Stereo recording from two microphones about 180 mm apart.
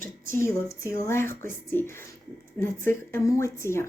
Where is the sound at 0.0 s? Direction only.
50° right (ahead or behind).